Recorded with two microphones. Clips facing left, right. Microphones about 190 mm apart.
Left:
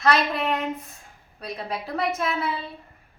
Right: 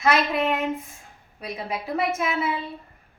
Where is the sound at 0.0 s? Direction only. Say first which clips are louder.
Right 1 dB; 10° right (ahead or behind).